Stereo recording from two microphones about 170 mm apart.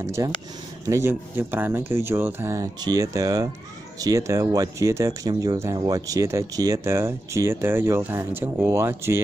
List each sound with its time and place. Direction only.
0.0 s speech: 15° right (ahead or behind)